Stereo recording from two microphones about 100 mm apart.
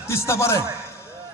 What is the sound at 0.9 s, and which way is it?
Basketball bounce, 25° left (ahead or behind).